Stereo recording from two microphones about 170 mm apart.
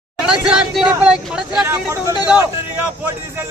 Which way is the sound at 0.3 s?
5° right (ahead or behind).